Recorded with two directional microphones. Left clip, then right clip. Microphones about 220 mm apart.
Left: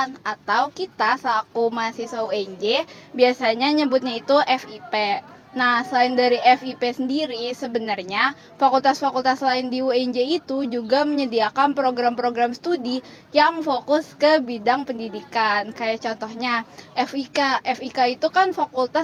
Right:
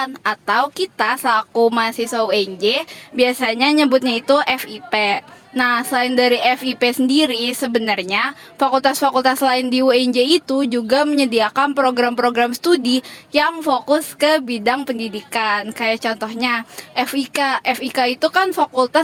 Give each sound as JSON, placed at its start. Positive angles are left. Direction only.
{"t": 0.2, "sound": "a woman's voice", "side_deg": -45}